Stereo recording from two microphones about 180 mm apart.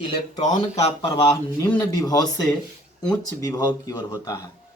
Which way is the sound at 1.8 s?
20° left (ahead or behind).